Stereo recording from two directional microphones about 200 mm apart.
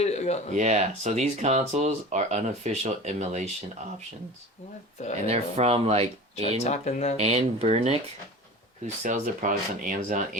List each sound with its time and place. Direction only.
0.0 s a sound: 35° left (ahead or behind)
0.5 s speech: 35° right (ahead or behind)
5.2 s speech: 30° right (ahead or behind)
6.7 s speech: 35° left (ahead or behind)
7.2 s speech: 30° right (ahead or behind)
9.0 s speech: 40° right (ahead or behind)